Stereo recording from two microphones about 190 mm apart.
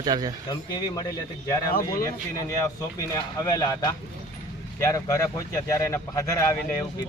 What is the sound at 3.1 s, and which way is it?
Speech, 20° left (ahead or behind).